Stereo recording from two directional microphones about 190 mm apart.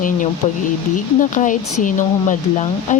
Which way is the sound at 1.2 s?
45° left (ahead or behind).